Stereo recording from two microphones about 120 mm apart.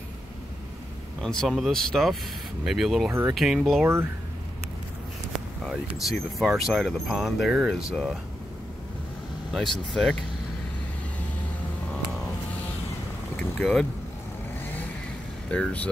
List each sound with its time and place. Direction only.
1.2 s speech: 5° left (ahead or behind)
3.1 s speech: 20° right (ahead or behind)
3.3 s speech: centre (ahead or behind)
3.8 s speech: 20° right (ahead or behind)
5.3 s speech: centre (ahead or behind)
9.5 s speech: 5° left (ahead or behind)
13.6 s speech: 5° left (ahead or behind)
15.5 s speech: 10° left (ahead or behind)